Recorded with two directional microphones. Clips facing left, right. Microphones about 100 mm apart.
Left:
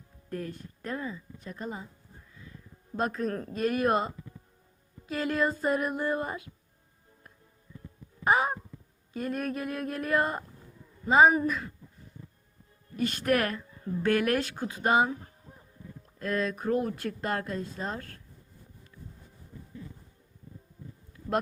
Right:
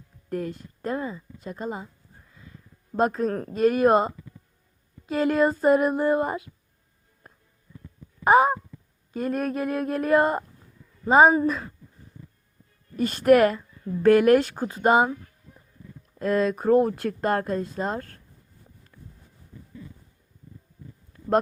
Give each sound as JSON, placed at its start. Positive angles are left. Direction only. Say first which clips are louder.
{"t": 0.3, "sound": "speech", "louder": "right 6 dB", "side_deg": -25}
{"t": 3.0, "sound": "speech", "louder": "right 7 dB", "side_deg": -30}
{"t": 8.2, "sound": "a sound", "louder": "right 8 dB", "side_deg": -30}
{"t": 9.1, "sound": "speech", "louder": "right 6 dB", "side_deg": -30}
{"t": 13.0, "sound": "speech", "louder": "right 9 dB", "side_deg": -35}
{"t": 14.4, "sound": "speech", "louder": "right 7 dB", "side_deg": -40}
{"t": 15.1, "sound": "a sound", "louder": "right 2 dB", "side_deg": 35}
{"t": 16.1, "sound": "speech", "louder": "right 7 dB", "side_deg": -30}